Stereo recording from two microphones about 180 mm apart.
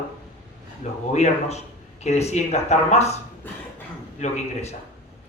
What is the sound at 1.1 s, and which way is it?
Speech, 35° left (ahead or behind).